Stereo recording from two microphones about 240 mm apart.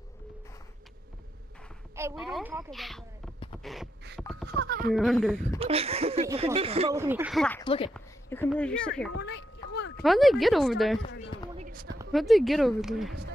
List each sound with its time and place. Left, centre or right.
2.0 s speech: centre
4.2 s a sound: centre
4.6 s speech: right
4.9 s speech: centre
5.6 s speech: right
7.0 s speech: centre
7.6 s a woman's voice: left
7.9 s speech: centre
9.1 s a sound: left
10.0 s speech: centre
11.5 s a sound: right
12.1 s speech: centre